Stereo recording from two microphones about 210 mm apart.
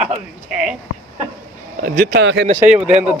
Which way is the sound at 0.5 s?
5° right (ahead or behind).